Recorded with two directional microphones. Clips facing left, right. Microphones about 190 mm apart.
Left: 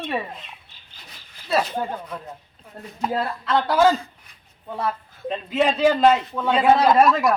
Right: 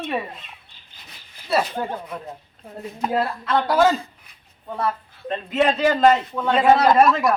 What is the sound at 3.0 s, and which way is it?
Speech, 5° right (ahead or behind).